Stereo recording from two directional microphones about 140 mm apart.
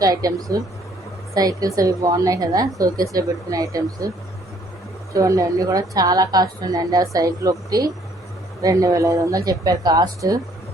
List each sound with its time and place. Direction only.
0.0 s a woman's voice: 25° right (ahead or behind)
5.1 s a woman's voice: 25° right (ahead or behind)